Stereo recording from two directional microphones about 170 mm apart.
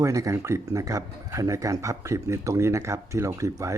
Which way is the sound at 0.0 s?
20° right (ahead or behind).